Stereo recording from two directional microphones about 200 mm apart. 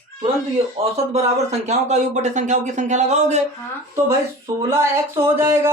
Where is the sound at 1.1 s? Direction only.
35° right (ahead or behind).